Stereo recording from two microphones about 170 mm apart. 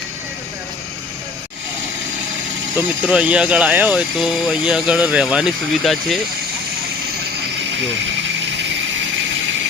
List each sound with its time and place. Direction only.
2.7 s speech: 10° right (ahead or behind)